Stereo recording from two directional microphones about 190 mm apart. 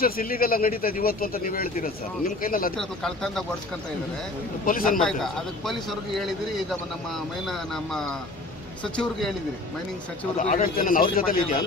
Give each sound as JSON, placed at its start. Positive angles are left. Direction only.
{"t": 0.0, "sound": "speech", "side_deg": 50}
{"t": 2.8, "sound": "a man's voice", "side_deg": 5}
{"t": 4.6, "sound": "speech", "side_deg": 50}
{"t": 4.9, "sound": "a man's voice", "side_deg": 0}
{"t": 10.4, "sound": "speech", "side_deg": 45}